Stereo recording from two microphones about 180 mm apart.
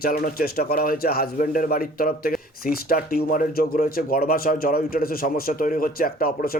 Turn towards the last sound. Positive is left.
turn(degrees=55)  # may be behind; listen again after turning